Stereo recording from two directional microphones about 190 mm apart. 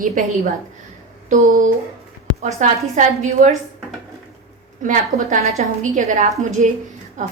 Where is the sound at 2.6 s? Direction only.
40° right (ahead or behind).